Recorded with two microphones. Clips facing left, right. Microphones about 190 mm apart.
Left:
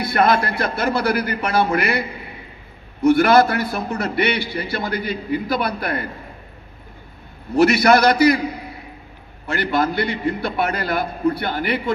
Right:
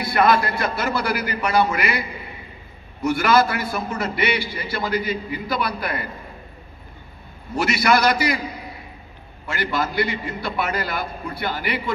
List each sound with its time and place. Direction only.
0.1 s a man's voice: 55° left (ahead or behind)
3.1 s a man's voice: 55° left (ahead or behind)
7.6 s a man's voice: 55° left (ahead or behind)
9.5 s a man's voice: 55° left (ahead or behind)